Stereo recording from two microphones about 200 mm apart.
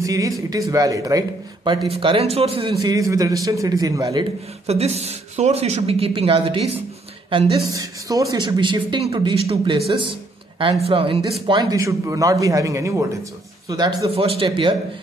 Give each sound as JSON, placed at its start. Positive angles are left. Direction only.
{"t": 0.0, "sound": "speech", "side_deg": -15}
{"t": 4.6, "sound": "speech", "side_deg": -30}